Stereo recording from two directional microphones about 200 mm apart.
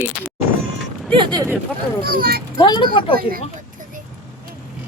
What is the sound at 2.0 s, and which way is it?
Speech, 45° right (ahead or behind).